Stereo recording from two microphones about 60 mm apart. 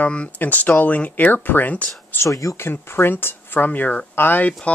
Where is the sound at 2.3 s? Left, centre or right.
Left.